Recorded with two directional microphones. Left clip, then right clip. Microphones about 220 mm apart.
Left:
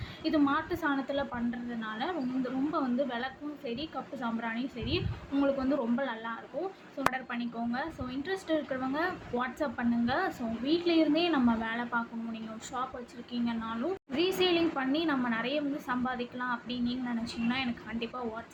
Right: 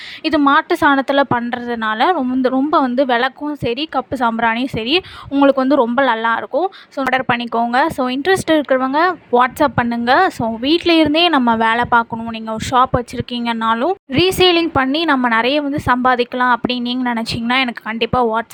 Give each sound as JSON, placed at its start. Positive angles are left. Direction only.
{"t": 0.3, "sound": "a woman's voice", "side_deg": -50}